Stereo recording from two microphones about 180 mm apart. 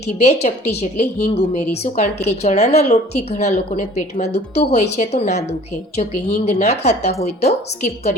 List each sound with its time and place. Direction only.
0.2 s a woman's voice: 35° left (ahead or behind)